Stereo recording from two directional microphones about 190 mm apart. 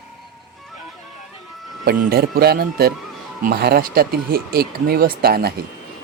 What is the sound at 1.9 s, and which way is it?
Speech, 55° right (ahead or behind).